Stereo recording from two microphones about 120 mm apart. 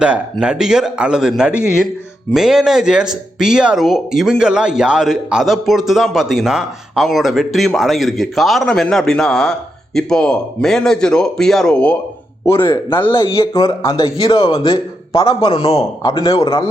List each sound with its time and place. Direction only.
0.0 s speech: 10° right (ahead or behind); by 11.9 s 10° left (ahead or behind)
13.0 s speech: 45° left (ahead or behind)
15.8 s speech: 40° left (ahead or behind)